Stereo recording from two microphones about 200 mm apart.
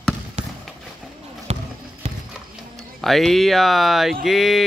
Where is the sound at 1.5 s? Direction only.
35° right (ahead or behind).